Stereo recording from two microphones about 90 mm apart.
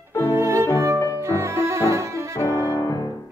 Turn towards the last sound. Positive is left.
turn(degrees=40)  # may be behind; listen again after turning